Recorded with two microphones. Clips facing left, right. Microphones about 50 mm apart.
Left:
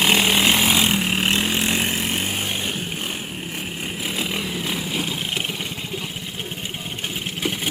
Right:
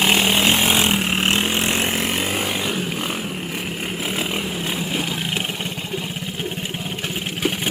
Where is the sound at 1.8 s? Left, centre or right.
Right.